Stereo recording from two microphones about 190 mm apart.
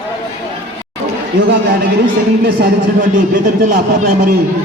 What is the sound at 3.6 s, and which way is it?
Speech, 50° right (ahead or behind).